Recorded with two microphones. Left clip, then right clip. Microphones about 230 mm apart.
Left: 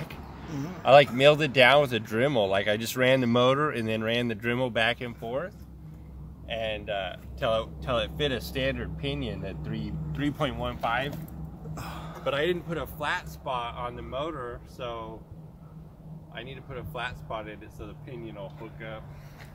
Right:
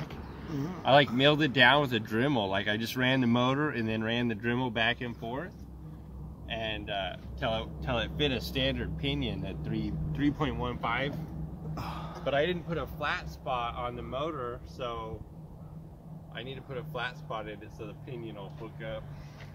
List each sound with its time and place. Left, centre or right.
0.8 s speech: centre
6.5 s speech: left
11.7 s a sound: centre
12.3 s speech: left; by 15.1 s centre
16.3 s speech: centre